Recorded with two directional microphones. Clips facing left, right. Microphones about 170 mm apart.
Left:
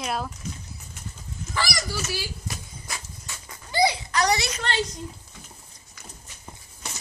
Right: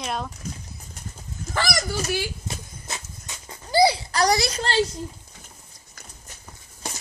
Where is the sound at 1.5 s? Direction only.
50° right (ahead or behind).